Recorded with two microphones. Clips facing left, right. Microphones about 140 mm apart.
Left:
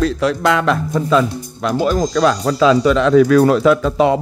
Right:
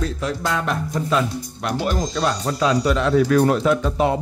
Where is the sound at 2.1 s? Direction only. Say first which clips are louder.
Left 7 dB; 90° left.